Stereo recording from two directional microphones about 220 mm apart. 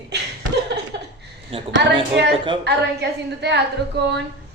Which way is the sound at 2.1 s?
50° right (ahead or behind).